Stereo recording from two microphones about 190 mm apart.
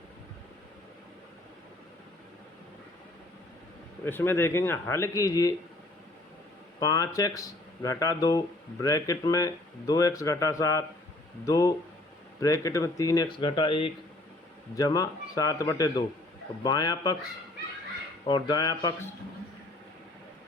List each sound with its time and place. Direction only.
4.0 s speech: 10° left (ahead or behind)
6.7 s speech: 20° left (ahead or behind)
18.3 s speech: 25° left (ahead or behind)